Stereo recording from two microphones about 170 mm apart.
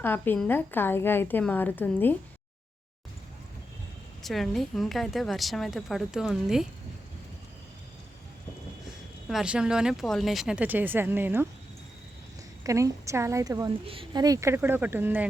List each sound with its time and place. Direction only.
0.0 s a woman's voice: 10° left (ahead or behind)
4.2 s a woman's voice: centre (ahead or behind)
9.3 s a woman's voice: 5° right (ahead or behind)
12.6 s a woman's voice: 20° right (ahead or behind)
13.8 s speech: 30° right (ahead or behind); by 15.3 s 10° right (ahead or behind)